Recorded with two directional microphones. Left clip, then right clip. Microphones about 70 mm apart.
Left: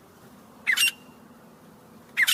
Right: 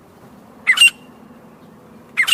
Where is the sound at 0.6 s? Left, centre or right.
Right.